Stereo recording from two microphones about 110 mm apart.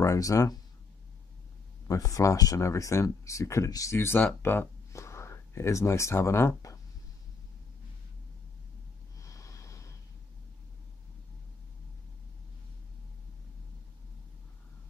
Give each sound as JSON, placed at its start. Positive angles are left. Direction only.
{"t": 0.0, "sound": "speech", "side_deg": 30}
{"t": 1.9, "sound": "speech", "side_deg": 30}
{"t": 9.2, "sound": "snort", "side_deg": 30}